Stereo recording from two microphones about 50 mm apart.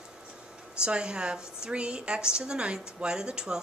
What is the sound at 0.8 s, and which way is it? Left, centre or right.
A woman's voice, centre.